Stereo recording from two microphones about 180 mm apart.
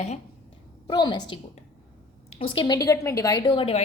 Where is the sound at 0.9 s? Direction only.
25° left (ahead or behind).